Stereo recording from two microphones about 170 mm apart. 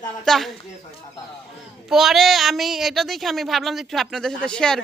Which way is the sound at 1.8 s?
Centre (ahead or behind).